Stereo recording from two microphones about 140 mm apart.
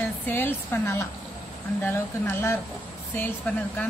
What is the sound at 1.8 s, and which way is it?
Speech, 15° left (ahead or behind).